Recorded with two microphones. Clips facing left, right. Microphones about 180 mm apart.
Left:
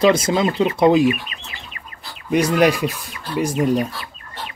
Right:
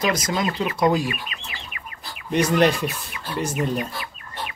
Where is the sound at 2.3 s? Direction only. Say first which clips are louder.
Left 3 dB; 10° left (ahead or behind).